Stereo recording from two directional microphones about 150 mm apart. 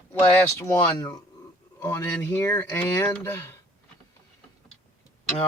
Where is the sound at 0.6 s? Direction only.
20° left (ahead or behind).